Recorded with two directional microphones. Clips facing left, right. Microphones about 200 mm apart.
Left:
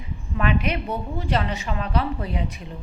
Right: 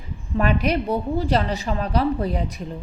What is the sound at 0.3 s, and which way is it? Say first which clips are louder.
A woman's voice: right 3 dB; 40° right (ahead or behind).